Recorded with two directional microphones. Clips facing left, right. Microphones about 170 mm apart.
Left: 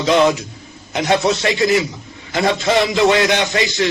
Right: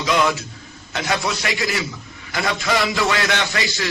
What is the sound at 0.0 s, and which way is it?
Speech, 30° left (ahead or behind).